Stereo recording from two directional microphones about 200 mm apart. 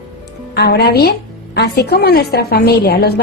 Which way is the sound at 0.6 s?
55° left (ahead or behind).